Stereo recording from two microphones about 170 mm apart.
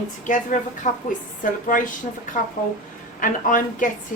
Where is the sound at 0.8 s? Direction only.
45° left (ahead or behind).